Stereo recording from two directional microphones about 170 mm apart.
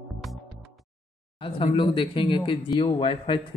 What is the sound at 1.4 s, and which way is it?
Speech, 30° left (ahead or behind).